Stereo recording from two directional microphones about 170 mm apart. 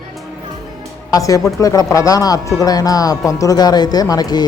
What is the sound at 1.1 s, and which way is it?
Speech, 20° left (ahead or behind).